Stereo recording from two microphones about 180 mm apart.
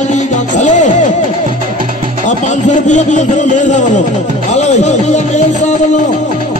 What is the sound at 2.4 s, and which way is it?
A man's voice, 40° left (ahead or behind).